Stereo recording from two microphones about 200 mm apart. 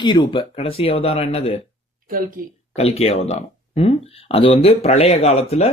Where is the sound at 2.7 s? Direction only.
30° left (ahead or behind).